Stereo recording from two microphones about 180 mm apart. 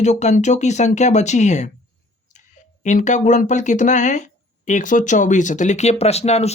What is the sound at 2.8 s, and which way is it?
Speech, 40° left (ahead or behind).